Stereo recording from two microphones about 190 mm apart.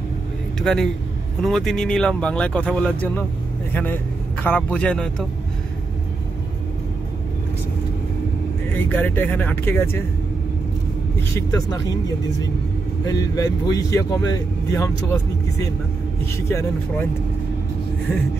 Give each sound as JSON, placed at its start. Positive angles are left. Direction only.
{"t": 0.6, "sound": "a man's voice", "side_deg": 5}
{"t": 8.7, "sound": "speech", "side_deg": 10}
{"t": 11.1, "sound": "speech", "side_deg": 15}
{"t": 13.0, "sound": "speech", "side_deg": 20}